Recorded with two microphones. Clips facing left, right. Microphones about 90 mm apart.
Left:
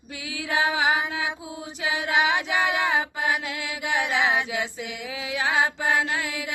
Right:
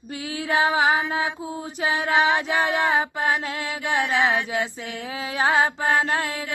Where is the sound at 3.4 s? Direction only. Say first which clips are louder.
Right 3 dB; 30° right (ahead or behind).